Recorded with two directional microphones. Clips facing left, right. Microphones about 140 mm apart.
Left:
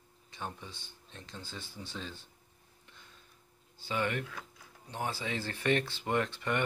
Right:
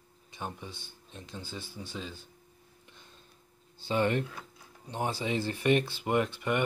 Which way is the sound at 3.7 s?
30° right (ahead or behind).